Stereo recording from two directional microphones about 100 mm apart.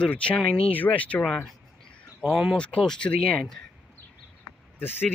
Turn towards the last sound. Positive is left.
turn(degrees=20)  # may be behind; listen again after turning